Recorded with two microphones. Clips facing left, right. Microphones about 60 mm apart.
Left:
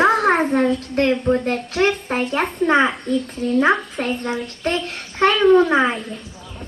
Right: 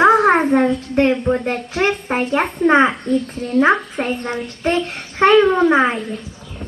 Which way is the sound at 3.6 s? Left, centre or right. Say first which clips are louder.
Right 4 dB; centre.